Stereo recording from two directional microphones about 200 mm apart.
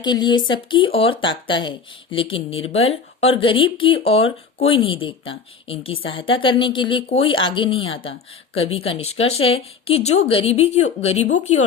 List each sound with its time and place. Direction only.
0.0 s speech: 20° left (ahead or behind); by 11.6 s 35° left (ahead or behind)